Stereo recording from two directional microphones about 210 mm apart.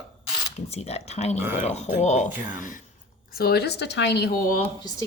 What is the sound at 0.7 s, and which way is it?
Speech, 30° left (ahead or behind).